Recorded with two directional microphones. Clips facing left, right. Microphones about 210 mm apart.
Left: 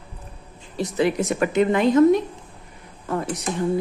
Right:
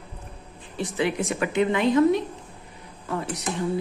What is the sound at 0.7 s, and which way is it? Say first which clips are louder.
Speech: left 4 dB; 40° left (ahead or behind).